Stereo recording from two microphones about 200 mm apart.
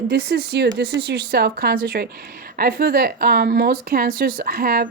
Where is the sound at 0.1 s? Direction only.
50° right (ahead or behind).